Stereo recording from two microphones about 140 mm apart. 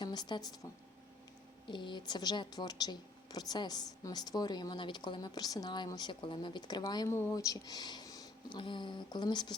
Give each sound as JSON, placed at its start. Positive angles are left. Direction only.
{"t": 0.0, "sound": "a woman's voice", "side_deg": 30}